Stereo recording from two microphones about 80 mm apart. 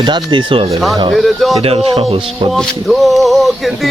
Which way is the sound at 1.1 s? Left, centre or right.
Centre.